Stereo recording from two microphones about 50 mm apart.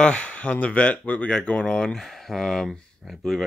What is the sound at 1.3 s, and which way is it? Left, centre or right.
Speech, centre.